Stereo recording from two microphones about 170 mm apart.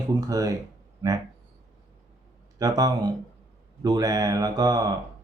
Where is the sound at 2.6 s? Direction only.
20° right (ahead or behind).